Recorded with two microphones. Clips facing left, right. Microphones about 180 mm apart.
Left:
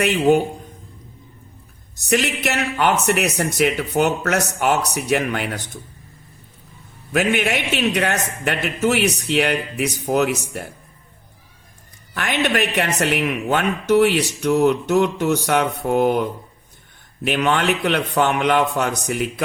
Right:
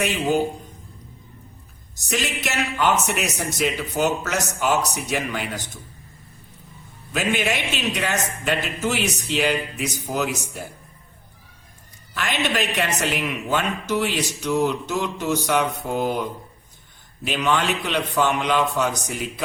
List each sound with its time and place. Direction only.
2.0 s speech: 60° left (ahead or behind)
7.1 s speech: 55° left (ahead or behind)
12.1 s speech: 55° left (ahead or behind)